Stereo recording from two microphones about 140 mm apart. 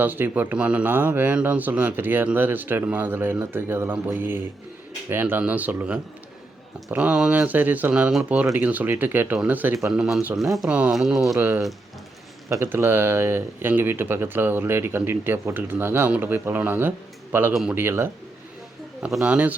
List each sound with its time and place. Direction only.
0.0 s speech: 15° right (ahead or behind)
3.9 s speech: 5° right (ahead or behind)
4.2 s speech: 15° right (ahead or behind)
11.3 s speech: 15° right (ahead or behind)
17.5 s speech: centre (ahead or behind)
17.7 s speech: 15° right (ahead or behind)